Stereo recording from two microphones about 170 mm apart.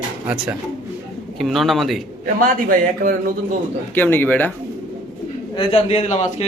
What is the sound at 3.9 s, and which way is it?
Speech, 10° left (ahead or behind).